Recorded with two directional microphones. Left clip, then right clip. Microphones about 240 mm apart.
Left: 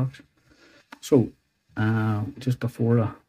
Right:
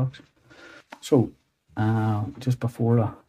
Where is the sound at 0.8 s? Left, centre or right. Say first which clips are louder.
Left 1 dB; centre.